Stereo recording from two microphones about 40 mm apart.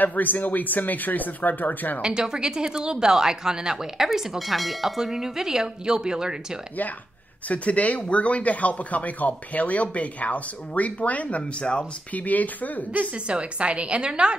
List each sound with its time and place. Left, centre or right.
0.0 s speech: left
2.0 s speech: right
4.5 s speech: centre
7.4 s speech: left
13.1 s a woman's voice: right